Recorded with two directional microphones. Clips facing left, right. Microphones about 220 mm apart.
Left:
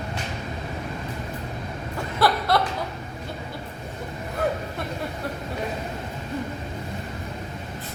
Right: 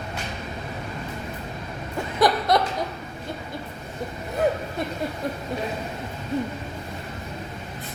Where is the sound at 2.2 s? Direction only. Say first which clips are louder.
Right 2 dB; 20° right (ahead or behind).